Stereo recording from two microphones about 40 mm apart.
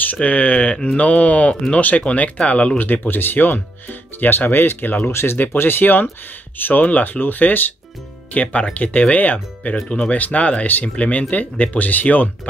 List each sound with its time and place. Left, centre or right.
0.0 s speech: left
2.8 s speech: left
5.1 s speech: left
5.4 s speech: left
6.6 s speech: left
8.3 s speech: left